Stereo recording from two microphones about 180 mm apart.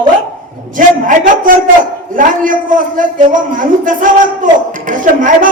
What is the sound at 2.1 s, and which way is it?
A woman's voice, 50° right (ahead or behind).